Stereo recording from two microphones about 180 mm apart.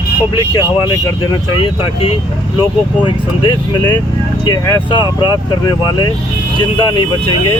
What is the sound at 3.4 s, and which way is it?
Speech, 25° left (ahead or behind).